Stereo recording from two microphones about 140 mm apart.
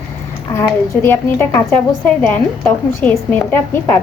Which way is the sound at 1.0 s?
15° left (ahead or behind).